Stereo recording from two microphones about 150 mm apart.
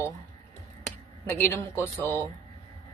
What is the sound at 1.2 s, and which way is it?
Speech, 10° left (ahead or behind).